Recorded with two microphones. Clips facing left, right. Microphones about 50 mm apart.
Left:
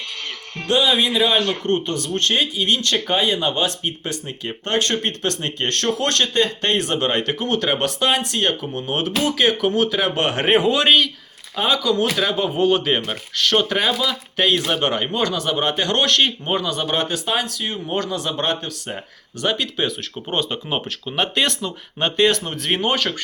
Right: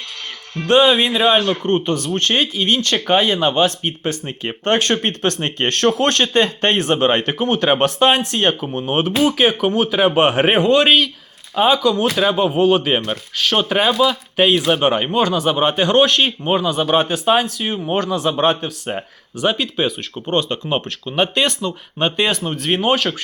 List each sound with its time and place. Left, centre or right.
0.7 s speech: right
10.5 s speech: centre
11.5 s speech: right
20.3 s speech: centre